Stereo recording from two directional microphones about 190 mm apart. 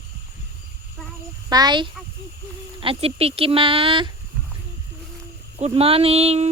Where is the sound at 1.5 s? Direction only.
20° right (ahead or behind).